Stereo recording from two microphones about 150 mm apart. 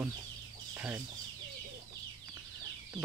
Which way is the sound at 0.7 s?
15° right (ahead or behind).